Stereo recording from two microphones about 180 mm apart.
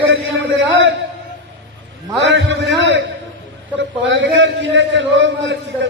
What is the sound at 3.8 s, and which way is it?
A man's voice, 90° right.